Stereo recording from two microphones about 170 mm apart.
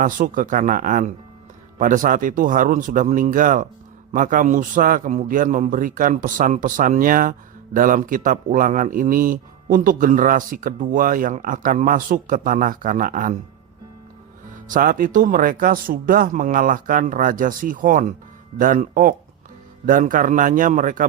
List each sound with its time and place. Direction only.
0.0 s a man's voice: 50° right (ahead or behind)
14.5 s a man's voice: 50° right (ahead or behind)